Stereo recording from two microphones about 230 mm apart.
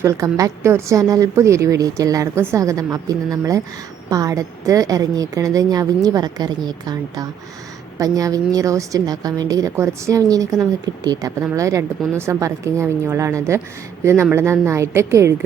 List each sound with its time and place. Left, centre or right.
0.0 s a woman's voice: centre